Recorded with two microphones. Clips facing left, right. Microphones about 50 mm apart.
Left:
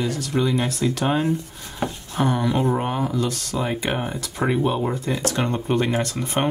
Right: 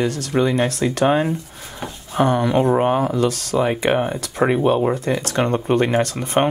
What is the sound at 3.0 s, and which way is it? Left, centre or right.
Speech, right.